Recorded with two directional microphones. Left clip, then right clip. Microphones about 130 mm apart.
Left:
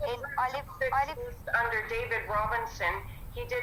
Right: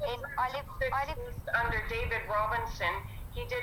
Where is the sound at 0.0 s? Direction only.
45° left (ahead or behind).